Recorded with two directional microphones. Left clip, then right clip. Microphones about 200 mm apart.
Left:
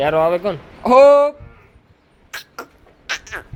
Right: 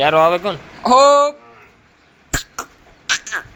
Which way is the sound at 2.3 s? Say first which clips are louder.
Right 7 dB; 25° left (ahead or behind).